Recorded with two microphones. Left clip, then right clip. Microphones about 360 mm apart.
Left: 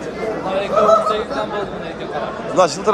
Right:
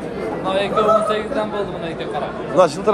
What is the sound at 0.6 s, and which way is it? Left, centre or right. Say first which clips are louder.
Chatter: left 2 dB; right.